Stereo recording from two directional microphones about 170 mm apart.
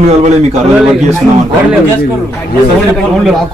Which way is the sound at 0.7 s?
5° right (ahead or behind).